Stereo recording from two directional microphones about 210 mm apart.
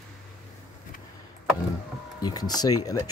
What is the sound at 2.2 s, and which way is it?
Speech, 20° left (ahead or behind).